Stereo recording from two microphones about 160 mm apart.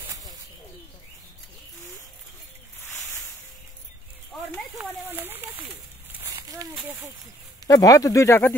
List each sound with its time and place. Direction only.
4.3 s snake: centre (ahead or behind)
5.0 s speech: 10° right (ahead or behind)
6.1 s a sound: 20° right (ahead or behind)
7.6 s speech: 20° left (ahead or behind)